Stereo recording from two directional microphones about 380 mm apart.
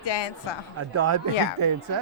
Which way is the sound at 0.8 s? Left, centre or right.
Right.